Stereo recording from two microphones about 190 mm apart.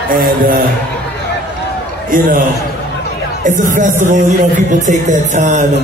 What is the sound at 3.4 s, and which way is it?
A man's voice, 45° right (ahead or behind).